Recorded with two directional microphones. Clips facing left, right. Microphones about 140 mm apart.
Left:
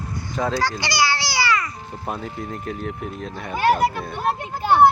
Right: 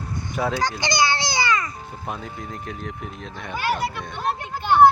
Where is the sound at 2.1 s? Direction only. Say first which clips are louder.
Left 4 dB; centre (ahead or behind).